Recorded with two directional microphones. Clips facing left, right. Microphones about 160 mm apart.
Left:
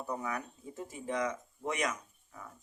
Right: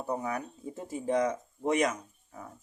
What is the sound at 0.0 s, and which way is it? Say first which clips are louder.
Speech: right 4 dB; 30° right (ahead or behind).